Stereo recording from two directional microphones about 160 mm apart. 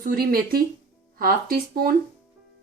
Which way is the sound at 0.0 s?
65° right (ahead or behind).